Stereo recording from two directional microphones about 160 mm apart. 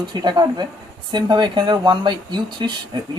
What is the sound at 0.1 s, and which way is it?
A man's voice, 25° right (ahead or behind).